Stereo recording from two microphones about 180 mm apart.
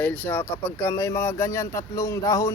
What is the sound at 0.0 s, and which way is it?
Speech, 10° left (ahead or behind).